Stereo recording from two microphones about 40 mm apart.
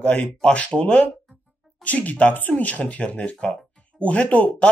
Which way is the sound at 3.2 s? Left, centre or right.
Left.